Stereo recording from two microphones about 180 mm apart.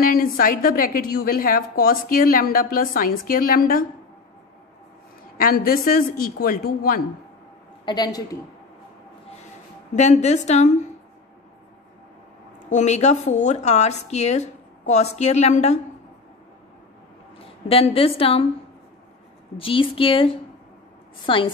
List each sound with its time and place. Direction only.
0.0 s a woman's voice: 50° left (ahead or behind)
5.4 s a woman's voice: 55° left (ahead or behind)
7.8 s speech: 25° left (ahead or behind)
9.9 s a woman's voice: 40° left (ahead or behind)
12.6 s a woman's voice: 40° left (ahead or behind)
17.4 s speech: 30° left (ahead or behind)
19.5 s speech: 30° left (ahead or behind)